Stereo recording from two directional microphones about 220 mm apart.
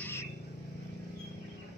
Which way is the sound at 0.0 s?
10° left (ahead or behind).